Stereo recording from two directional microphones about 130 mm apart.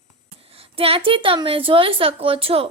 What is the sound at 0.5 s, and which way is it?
Speech, 45° right (ahead or behind).